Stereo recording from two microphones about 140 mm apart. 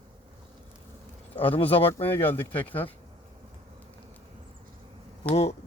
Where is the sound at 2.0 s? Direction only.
15° left (ahead or behind).